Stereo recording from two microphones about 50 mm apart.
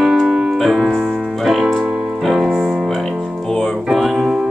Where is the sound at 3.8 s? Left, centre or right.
Centre.